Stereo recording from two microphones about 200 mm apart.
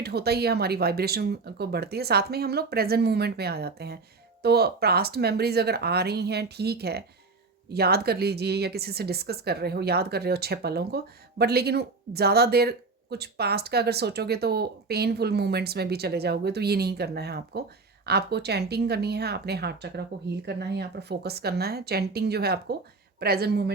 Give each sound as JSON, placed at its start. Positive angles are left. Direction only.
{"t": 0.0, "sound": "speech", "side_deg": -55}